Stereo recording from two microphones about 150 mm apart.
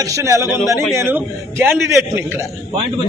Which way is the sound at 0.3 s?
20° right (ahead or behind).